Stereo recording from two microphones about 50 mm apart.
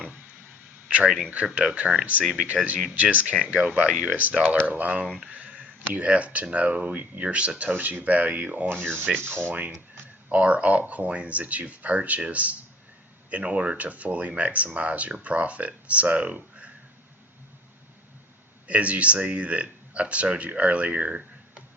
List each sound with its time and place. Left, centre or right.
0.9 s speech: right
7.7 s speech: right
8.7 s speech: right
9.5 s speech: right
18.7 s speech: right